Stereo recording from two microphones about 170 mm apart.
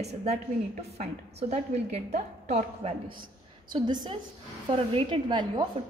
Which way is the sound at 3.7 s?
25° right (ahead or behind).